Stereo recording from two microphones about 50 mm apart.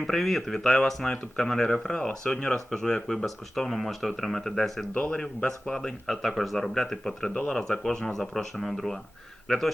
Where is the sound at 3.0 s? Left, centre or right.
Centre.